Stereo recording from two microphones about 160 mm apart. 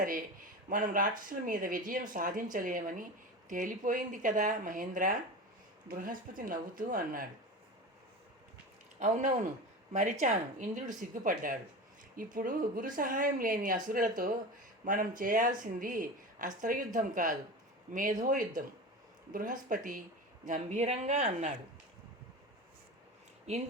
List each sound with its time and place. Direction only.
0.7 s speech: 55° right (ahead or behind)
9.0 s speech: 50° right (ahead or behind)